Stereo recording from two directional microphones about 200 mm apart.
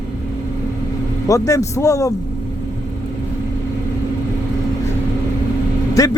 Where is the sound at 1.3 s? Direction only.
15° left (ahead or behind).